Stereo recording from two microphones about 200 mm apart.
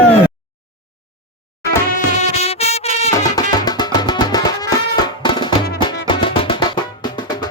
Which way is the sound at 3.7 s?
20° left (ahead or behind).